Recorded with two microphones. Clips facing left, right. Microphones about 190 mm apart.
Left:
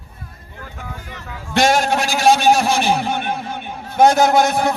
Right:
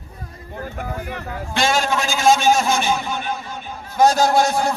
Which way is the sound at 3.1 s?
60° left (ahead or behind).